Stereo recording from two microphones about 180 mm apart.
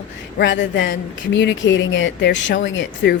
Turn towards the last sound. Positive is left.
turn(degrees=90)